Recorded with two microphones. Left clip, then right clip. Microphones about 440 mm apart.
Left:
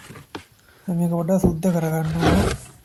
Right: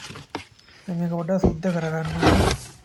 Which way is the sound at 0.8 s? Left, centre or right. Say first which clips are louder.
Left 3 dB; left.